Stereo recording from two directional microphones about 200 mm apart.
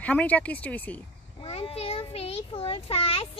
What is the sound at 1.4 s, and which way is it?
A child's voice, 30° left (ahead or behind).